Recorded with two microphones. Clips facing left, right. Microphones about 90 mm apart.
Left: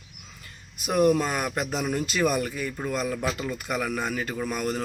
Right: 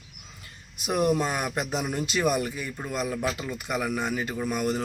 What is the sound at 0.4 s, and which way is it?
A man's voice, 20° right (ahead or behind).